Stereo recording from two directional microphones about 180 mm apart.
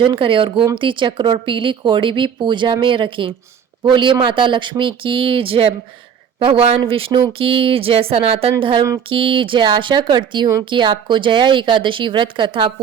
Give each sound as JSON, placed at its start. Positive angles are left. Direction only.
{"t": 0.0, "sound": "speech", "side_deg": -30}